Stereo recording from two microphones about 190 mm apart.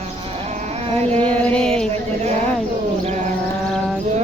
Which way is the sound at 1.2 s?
5° left (ahead or behind).